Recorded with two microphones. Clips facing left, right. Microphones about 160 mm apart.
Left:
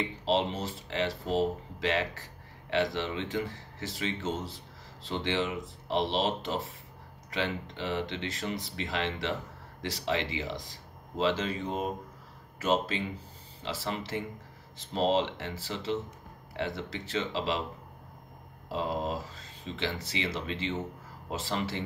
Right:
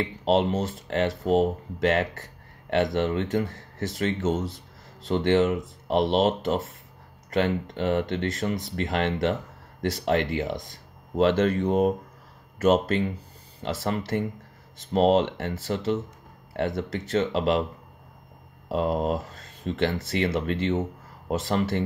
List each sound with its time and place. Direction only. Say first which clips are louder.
0.0 s speech: right 6 dB; 50° right (ahead or behind)
18.7 s speech: right 7 dB; 55° right (ahead or behind)